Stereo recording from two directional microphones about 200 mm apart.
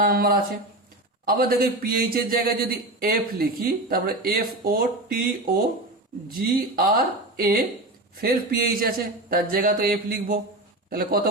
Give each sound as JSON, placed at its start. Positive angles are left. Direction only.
{"t": 0.0, "sound": "a man's voice", "side_deg": -45}
{"t": 6.2, "sound": "a man's voice", "side_deg": -45}